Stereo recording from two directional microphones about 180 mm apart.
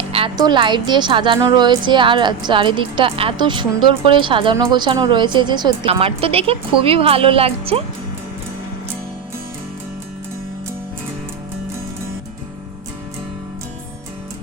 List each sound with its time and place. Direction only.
0.1 s a woman's voice: 25° right (ahead or behind)